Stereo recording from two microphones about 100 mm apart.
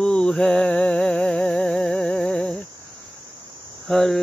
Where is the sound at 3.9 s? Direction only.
Centre (ahead or behind).